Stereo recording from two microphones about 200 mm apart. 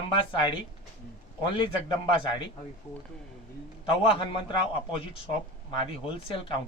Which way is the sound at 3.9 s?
25° left (ahead or behind).